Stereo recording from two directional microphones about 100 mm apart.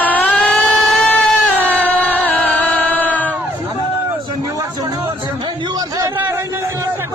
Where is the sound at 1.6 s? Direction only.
20° right (ahead or behind).